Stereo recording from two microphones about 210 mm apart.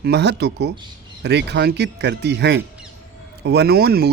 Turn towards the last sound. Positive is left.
turn(degrees=-50)  # may be behind; listen again after turning